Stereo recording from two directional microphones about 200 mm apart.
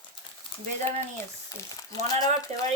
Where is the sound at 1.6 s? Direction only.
15° left (ahead or behind).